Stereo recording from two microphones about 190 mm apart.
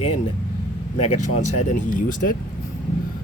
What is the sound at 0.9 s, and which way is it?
Speech, 35° left (ahead or behind).